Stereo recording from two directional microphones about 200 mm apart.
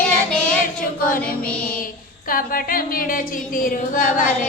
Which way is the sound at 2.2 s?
45° left (ahead or behind).